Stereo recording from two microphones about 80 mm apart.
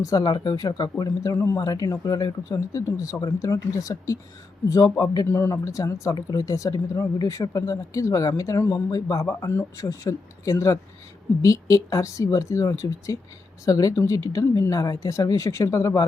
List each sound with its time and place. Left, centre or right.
0.0 s speech: left
5.3 s speech: left
9.4 s speech: left